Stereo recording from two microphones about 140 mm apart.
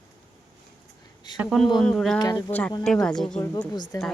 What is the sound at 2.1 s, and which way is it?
Speech, 25° left (ahead or behind).